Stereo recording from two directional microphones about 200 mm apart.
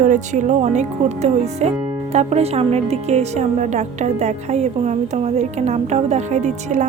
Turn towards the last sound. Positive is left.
turn(degrees=-35)  # may be behind; listen again after turning